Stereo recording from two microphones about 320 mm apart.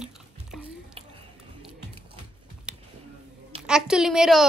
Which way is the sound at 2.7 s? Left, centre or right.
Centre.